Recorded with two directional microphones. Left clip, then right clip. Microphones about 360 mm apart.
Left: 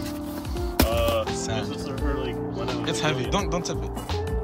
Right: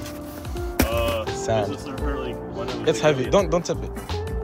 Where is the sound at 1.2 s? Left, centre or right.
Centre.